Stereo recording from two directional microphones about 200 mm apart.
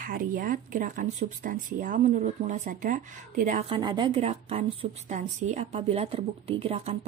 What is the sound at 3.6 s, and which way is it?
A woman's voice, 25° right (ahead or behind).